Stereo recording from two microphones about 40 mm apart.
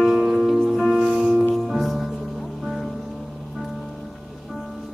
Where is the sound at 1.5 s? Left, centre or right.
Centre.